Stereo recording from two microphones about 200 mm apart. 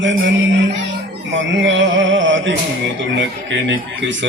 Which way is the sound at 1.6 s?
65° right (ahead or behind).